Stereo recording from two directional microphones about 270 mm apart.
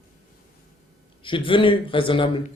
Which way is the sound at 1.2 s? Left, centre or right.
Centre.